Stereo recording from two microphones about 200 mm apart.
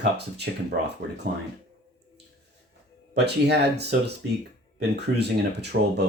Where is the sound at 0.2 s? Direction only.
55° right (ahead or behind).